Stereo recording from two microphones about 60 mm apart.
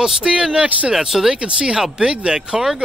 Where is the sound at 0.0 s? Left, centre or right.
Centre.